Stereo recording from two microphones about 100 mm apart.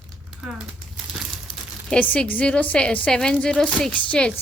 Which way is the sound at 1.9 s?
15° left (ahead or behind).